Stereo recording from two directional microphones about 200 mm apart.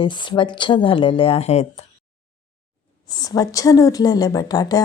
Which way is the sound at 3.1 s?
20° left (ahead or behind).